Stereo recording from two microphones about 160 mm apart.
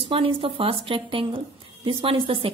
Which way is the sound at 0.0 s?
35° right (ahead or behind).